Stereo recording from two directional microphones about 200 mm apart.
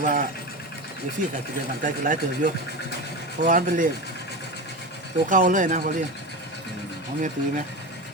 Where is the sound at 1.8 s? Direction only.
40° right (ahead or behind).